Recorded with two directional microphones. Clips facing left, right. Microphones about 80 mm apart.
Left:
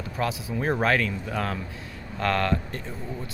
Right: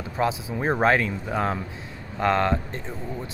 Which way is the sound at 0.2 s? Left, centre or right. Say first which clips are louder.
Right 3 dB; right.